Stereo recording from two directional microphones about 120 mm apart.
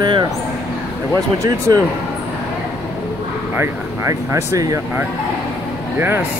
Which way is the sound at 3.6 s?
20° right (ahead or behind).